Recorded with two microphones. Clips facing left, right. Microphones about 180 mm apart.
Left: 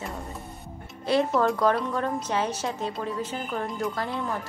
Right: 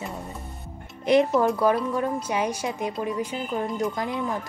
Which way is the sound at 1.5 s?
5° right (ahead or behind).